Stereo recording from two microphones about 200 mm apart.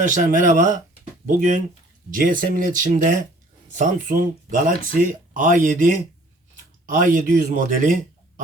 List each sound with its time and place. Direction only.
0.0 s speech: 40° right (ahead or behind)
2.0 s speech: 45° right (ahead or behind)